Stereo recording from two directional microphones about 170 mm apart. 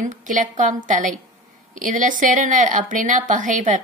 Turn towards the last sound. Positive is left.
turn(degrees=-45)  # may be behind; listen again after turning